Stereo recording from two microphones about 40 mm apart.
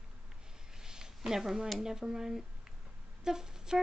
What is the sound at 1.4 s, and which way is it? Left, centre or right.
A woman's voice, centre.